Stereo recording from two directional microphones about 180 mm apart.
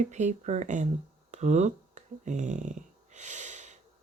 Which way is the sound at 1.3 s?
40° right (ahead or behind).